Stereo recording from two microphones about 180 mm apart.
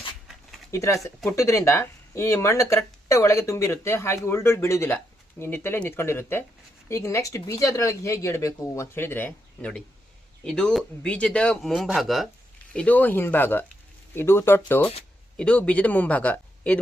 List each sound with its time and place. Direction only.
0.7 s speech: 15° left (ahead or behind)